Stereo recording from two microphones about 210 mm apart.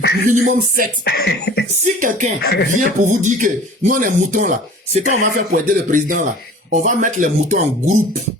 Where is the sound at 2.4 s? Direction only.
50° left (ahead or behind).